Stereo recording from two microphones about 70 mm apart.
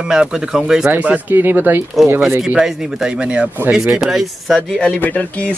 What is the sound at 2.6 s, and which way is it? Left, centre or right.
Speech, centre.